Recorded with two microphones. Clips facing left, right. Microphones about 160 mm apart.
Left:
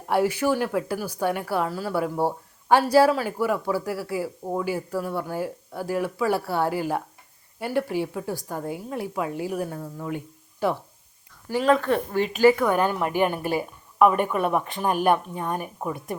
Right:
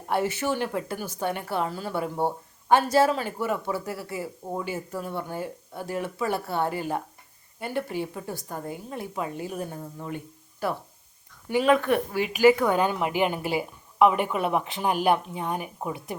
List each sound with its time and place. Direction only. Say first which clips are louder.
0.1 s a woman's voice: left 4 dB; 10° left (ahead or behind)
11.4 s speech: even; 15° right (ahead or behind)